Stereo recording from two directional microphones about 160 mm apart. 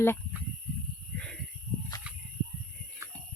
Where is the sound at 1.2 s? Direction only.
5° left (ahead or behind).